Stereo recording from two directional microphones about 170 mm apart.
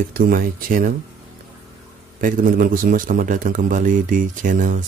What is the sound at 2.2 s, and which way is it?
Speech, 50° right (ahead or behind).